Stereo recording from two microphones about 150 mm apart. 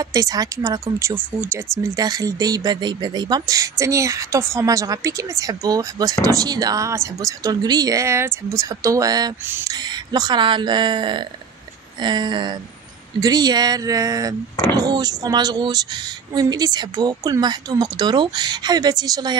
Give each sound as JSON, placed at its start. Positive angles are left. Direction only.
{"t": 0.0, "sound": "speech", "side_deg": -25}